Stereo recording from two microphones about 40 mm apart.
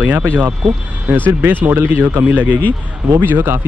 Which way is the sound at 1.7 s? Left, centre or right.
Right.